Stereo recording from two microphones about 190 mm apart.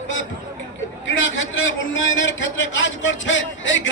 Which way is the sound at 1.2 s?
85° left.